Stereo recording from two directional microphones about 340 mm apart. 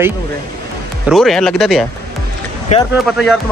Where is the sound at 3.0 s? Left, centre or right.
Centre.